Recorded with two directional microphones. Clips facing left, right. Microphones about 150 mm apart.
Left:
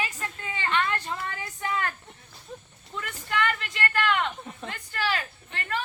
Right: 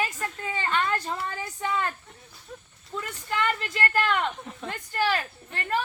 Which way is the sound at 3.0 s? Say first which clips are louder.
Even; 40° right (ahead or behind).